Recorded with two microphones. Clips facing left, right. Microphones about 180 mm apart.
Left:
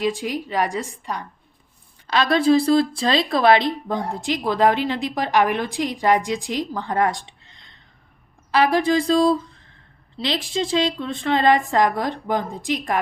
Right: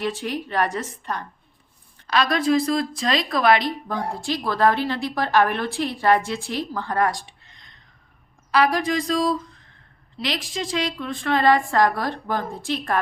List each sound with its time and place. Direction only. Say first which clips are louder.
0.0 s a woman's voice: left 3 dB; 15° left (ahead or behind)
2.0 s speech: left 3 dB; 25° left (ahead or behind)
8.5 s speech: left 3 dB; 25° left (ahead or behind)